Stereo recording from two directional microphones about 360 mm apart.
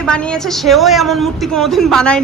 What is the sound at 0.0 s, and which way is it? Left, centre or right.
A woman's voice, centre.